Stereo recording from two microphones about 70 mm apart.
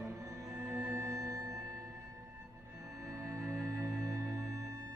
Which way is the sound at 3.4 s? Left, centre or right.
Centre.